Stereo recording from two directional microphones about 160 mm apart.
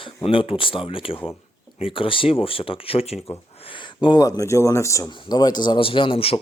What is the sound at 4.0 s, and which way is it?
Speech, 25° left (ahead or behind).